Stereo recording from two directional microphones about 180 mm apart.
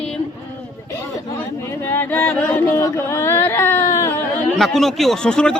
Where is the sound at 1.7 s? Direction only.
10° left (ahead or behind).